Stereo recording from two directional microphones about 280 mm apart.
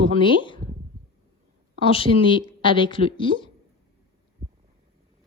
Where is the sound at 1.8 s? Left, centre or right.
Centre.